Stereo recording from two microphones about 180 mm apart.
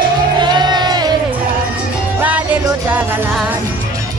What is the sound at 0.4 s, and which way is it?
Crowd, 25° right (ahead or behind).